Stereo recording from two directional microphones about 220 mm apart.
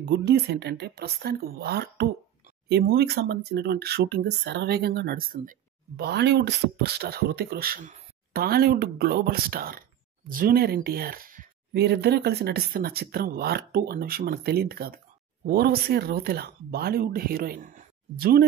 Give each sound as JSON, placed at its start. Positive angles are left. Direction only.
{"t": 0.1, "sound": "speech", "side_deg": -50}